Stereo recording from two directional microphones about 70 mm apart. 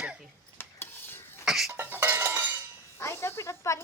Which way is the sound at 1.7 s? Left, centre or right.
Right.